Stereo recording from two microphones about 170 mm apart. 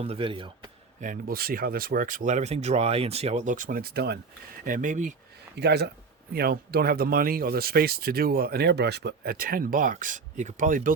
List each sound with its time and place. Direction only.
0.0 s speech: 35° right (ahead or behind)
1.0 s speech: 55° right (ahead or behind)
4.6 s speech: 50° right (ahead or behind)
5.5 s speech: 75° right (ahead or behind)
6.3 s speech: 65° right (ahead or behind)